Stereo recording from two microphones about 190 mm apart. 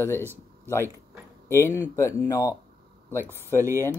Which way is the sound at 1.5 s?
15° left (ahead or behind).